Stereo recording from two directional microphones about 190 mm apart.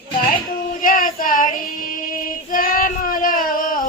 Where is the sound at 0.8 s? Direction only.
45° left (ahead or behind).